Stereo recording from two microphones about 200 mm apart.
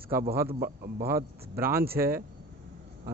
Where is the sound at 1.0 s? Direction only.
10° right (ahead or behind).